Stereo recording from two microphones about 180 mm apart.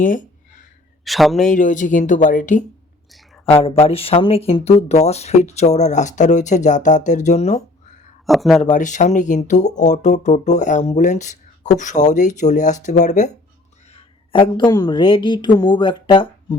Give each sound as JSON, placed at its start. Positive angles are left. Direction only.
{"t": 0.0, "sound": "speech", "side_deg": 45}
{"t": 1.0, "sound": "a man's voice", "side_deg": 0}
{"t": 1.5, "sound": "speech", "side_deg": 45}
{"t": 3.6, "sound": "speech", "side_deg": 30}
{"t": 8.3, "sound": "a man's voice", "side_deg": 0}
{"t": 8.6, "sound": "speech", "side_deg": 45}
{"t": 13.9, "sound": "a woman's voice", "side_deg": 30}